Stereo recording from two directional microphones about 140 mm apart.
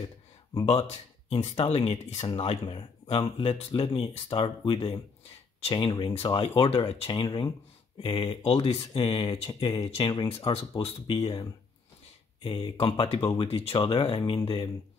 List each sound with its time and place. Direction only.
0.7 s speech: 50° left (ahead or behind)
1.5 s speech: 35° left (ahead or behind)
12.8 s speech: 35° left (ahead or behind)